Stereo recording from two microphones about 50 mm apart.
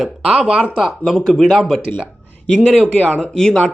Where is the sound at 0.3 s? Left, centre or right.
Centre.